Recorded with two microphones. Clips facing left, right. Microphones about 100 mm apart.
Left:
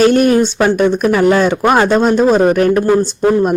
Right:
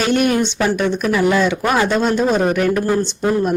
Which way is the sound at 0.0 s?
45° left (ahead or behind).